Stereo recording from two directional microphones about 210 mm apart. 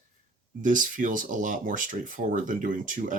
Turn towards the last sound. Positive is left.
turn(degrees=-40)  # may be behind; listen again after turning